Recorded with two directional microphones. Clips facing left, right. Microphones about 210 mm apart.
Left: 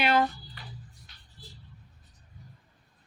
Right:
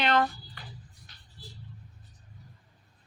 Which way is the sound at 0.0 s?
10° left (ahead or behind).